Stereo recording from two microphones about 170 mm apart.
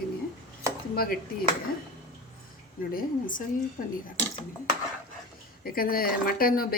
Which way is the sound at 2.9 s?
50° left (ahead or behind).